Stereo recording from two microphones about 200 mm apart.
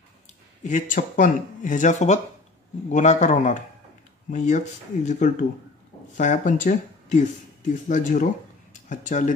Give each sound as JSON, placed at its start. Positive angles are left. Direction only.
{"t": 0.7, "sound": "speech", "side_deg": 40}